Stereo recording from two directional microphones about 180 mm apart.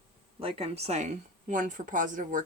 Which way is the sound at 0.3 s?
35° right (ahead or behind).